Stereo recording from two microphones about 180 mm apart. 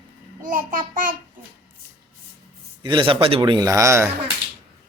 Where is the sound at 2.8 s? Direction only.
30° right (ahead or behind).